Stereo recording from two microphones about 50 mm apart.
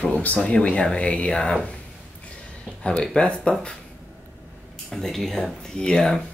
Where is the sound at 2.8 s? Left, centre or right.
Centre.